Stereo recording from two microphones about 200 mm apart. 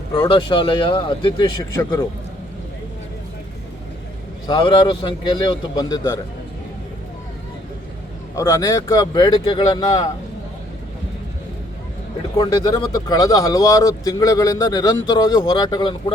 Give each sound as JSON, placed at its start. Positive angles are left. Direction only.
{"t": 0.1, "sound": "speech", "side_deg": 25}
{"t": 4.4, "sound": "speech", "side_deg": 20}
{"t": 8.4, "sound": "speech", "side_deg": 15}
{"t": 12.4, "sound": "speech", "side_deg": 20}